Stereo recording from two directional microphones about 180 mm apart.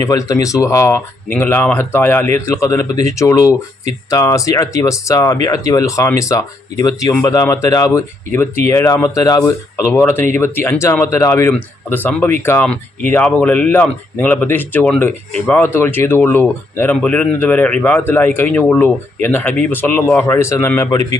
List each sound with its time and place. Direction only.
0.0 s speech: 20° left (ahead or behind)